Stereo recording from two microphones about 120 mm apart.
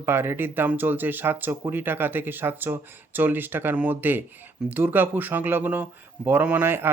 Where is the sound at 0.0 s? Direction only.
20° right (ahead or behind).